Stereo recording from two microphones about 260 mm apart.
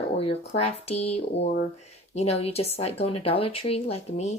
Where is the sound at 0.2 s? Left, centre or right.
Left.